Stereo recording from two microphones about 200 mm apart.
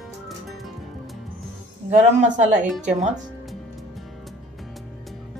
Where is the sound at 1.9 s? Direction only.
40° right (ahead or behind).